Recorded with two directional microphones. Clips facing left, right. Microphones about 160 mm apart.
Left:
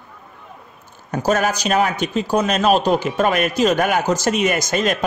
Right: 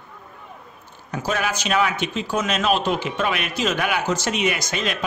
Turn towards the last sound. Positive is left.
turn(degrees=45)  # may be behind; listen again after turning